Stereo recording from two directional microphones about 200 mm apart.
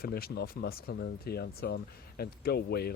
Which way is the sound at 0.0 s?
50° left (ahead or behind).